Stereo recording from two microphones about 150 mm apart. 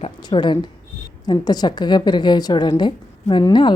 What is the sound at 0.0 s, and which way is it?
A woman's voice, 30° left (ahead or behind).